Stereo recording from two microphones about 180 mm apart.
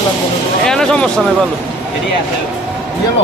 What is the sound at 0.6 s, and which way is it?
Speech, 5° left (ahead or behind).